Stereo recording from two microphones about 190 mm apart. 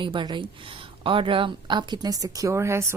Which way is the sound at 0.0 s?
25° right (ahead or behind).